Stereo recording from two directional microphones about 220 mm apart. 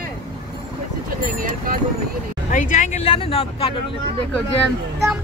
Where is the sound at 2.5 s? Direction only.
35° left (ahead or behind).